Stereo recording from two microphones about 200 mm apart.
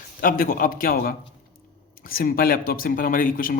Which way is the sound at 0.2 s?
45° left (ahead or behind).